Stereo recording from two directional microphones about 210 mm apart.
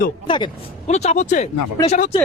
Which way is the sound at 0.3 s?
20° left (ahead or behind).